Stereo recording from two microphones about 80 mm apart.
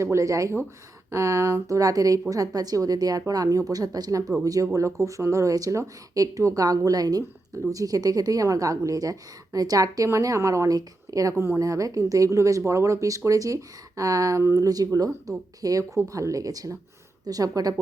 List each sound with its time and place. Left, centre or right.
0.0 s a woman's voice: right